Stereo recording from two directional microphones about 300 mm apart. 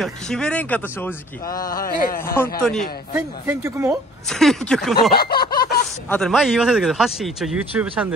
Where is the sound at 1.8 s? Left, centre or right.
Left.